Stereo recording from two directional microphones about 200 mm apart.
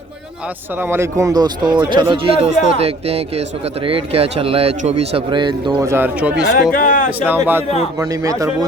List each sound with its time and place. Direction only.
0.8 s a man's voice: 10° right (ahead or behind)
6.7 s speech: 45° left (ahead or behind)
7.3 s speech: 10° right (ahead or behind)